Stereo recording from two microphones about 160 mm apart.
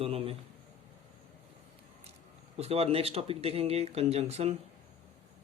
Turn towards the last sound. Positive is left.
turn(degrees=-40)  # may be behind; listen again after turning